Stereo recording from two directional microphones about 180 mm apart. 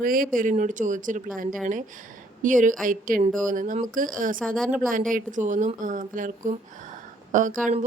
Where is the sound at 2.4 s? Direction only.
45° right (ahead or behind).